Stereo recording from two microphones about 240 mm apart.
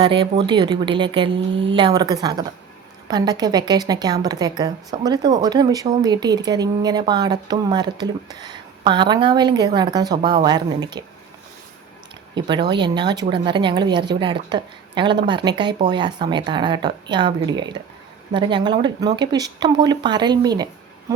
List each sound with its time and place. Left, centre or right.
0.0 s a woman's voice: centre
12.3 s a woman's voice: centre